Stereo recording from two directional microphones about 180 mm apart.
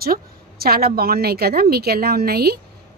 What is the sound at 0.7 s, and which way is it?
A woman's voice, 55° right (ahead or behind).